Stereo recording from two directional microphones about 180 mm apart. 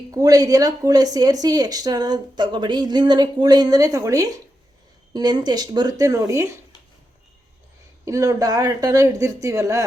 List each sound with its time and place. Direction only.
0.1 s speech: 20° right (ahead or behind)
8.0 s speech: 15° right (ahead or behind)